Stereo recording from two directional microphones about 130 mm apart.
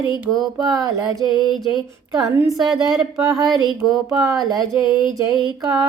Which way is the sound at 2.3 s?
25° right (ahead or behind).